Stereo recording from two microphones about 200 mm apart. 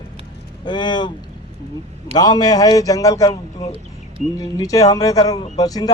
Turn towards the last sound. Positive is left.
turn(degrees=20)  # may be behind; listen again after turning